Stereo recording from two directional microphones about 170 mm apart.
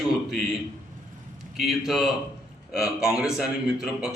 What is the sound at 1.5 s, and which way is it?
Speech, centre (ahead or behind).